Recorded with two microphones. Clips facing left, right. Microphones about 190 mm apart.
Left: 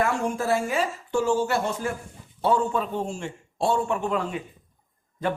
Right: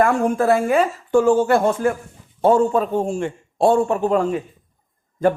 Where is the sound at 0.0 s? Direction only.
55° right (ahead or behind).